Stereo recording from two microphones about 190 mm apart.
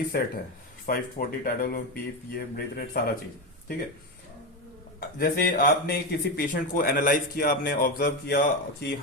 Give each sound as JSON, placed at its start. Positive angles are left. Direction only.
{"t": 0.1, "sound": "speech", "side_deg": 55}
{"t": 4.9, "sound": "speech", "side_deg": 50}